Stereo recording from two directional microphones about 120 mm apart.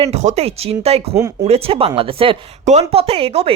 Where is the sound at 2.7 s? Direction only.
60° right (ahead or behind).